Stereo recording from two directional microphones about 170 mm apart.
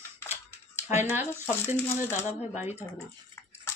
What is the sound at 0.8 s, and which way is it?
Speech, 10° right (ahead or behind).